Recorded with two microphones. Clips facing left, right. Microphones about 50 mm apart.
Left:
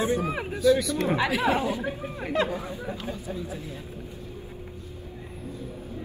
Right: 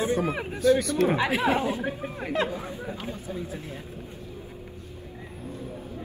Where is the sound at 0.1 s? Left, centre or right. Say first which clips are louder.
Even; right.